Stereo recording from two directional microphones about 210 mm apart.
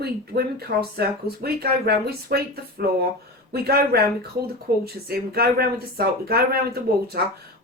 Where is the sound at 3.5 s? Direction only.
45° right (ahead or behind).